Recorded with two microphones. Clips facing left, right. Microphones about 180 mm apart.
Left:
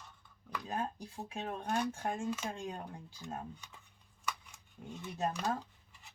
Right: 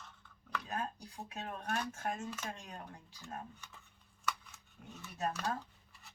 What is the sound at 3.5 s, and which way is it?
Speech, 15° left (ahead or behind).